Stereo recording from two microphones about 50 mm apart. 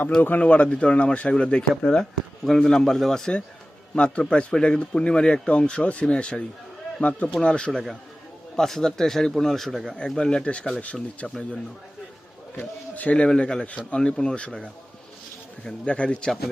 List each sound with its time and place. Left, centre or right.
0.2 s a man's voice: left; by 2.0 s centre
2.4 s a man's voice: centre
3.9 s speech: left
7.7 s a man's voice: centre
10.0 s speech: centre
12.5 s speech: left
16.0 s a man's voice: centre